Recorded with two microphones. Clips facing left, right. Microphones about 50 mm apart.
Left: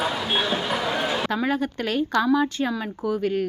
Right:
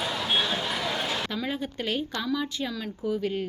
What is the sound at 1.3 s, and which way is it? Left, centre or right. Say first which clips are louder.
Speech: left 7 dB; left.